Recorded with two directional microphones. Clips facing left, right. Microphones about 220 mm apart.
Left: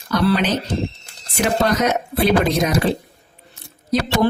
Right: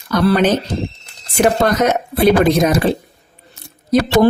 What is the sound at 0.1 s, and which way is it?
Speech, 45° right (ahead or behind).